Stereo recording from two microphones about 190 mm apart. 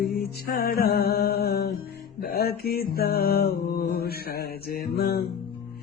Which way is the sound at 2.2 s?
55° left (ahead or behind).